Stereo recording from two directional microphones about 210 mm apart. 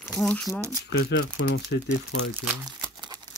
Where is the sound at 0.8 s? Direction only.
50° left (ahead or behind).